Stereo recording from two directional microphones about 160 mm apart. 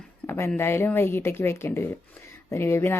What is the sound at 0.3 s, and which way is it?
Speech, 15° left (ahead or behind).